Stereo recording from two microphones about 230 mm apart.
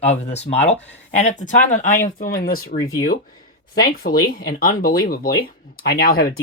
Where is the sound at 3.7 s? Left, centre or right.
Left.